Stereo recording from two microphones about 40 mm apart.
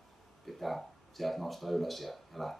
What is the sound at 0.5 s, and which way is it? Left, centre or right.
Speech, centre.